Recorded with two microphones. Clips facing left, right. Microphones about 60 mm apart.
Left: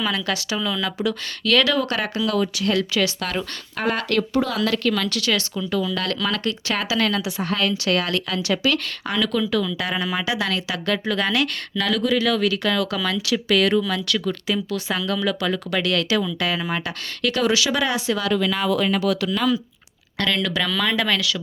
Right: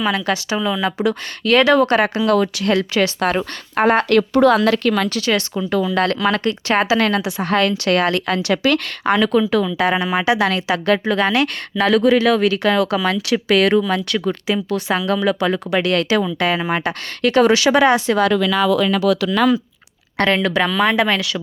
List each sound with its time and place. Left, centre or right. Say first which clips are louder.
0.2 s speech: right 5 dB; right
2.7 s speech: right 6 dB; right
4.2 s speech: right 8 dB; right
5.0 s speech: right 4 dB; right
7.3 s speech: right 5 dB; right
12.4 s speech: right 5 dB; right
13.3 s speech: right 4 dB; right
13.8 s speech: right 4 dB; right
18.3 s speech: right 5 dB; right
20.1 s speech: right 6 dB; right
20.7 s speech: right 5 dB; right